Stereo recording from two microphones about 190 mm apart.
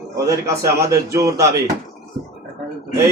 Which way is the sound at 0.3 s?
15° right (ahead or behind).